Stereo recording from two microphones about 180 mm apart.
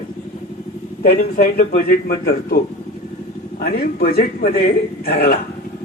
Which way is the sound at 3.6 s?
55° left (ahead or behind).